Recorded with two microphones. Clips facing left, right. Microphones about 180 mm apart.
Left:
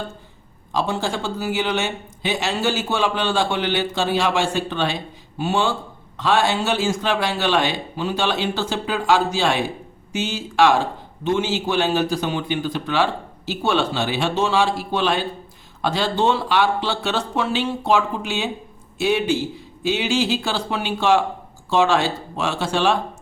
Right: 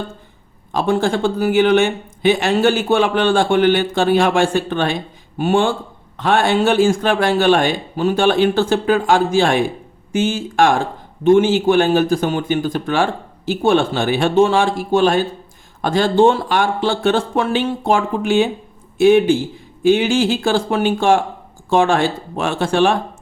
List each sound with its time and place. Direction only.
0.7 s speech: 55° right (ahead or behind)